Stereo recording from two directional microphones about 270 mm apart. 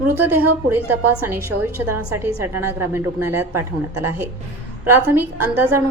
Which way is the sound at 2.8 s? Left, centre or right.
Centre.